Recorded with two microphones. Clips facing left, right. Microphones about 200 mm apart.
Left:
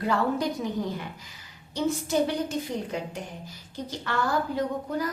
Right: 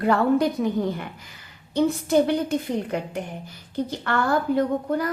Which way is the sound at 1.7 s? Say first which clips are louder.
Right 6 dB; 60° right (ahead or behind).